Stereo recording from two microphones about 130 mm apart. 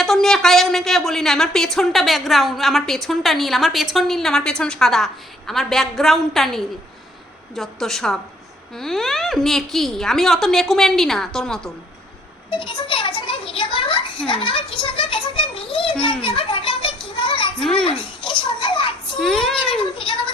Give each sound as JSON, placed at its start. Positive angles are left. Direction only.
{"t": 0.0, "sound": "a woman's voice", "side_deg": 0}
{"t": 12.5, "sound": "a child's voice", "side_deg": 40}
{"t": 16.2, "sound": "children playing", "side_deg": 40}
{"t": 17.6, "sound": "a woman's voice", "side_deg": 5}
{"t": 18.0, "sound": "a child's voice", "side_deg": 40}
{"t": 19.2, "sound": "a woman's voice", "side_deg": 5}
{"t": 20.0, "sound": "a woman's voice", "side_deg": 40}